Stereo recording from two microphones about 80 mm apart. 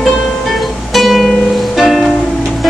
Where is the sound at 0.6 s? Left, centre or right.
Centre.